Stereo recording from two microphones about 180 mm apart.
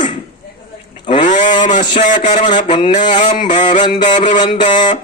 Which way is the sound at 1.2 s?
45° left (ahead or behind).